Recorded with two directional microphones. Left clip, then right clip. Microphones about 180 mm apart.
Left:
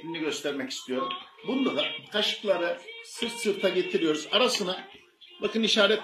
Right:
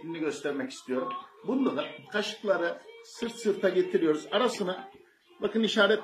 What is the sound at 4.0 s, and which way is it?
Speech, 10° right (ahead or behind).